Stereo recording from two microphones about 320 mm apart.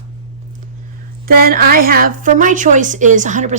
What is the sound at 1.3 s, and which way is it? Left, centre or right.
A woman's voice, right.